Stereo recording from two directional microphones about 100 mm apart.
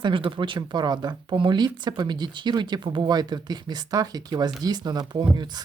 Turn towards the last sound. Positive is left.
turn(degrees=-50)  # may be behind; listen again after turning